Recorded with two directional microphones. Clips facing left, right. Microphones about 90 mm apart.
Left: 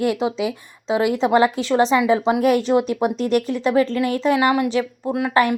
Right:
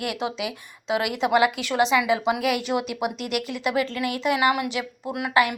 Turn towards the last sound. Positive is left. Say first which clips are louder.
# left 4 dB
turn(degrees=35)  # may be behind; listen again after turning